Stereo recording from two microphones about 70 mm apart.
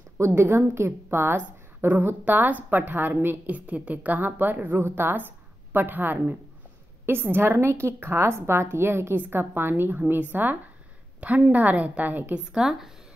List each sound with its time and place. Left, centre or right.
0.2 s a woman's voice: right
12.5 s speech: centre